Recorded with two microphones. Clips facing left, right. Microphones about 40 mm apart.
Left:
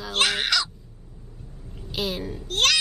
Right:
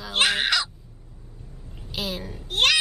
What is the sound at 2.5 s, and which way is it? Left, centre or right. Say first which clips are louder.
Speech: right 1 dB; centre.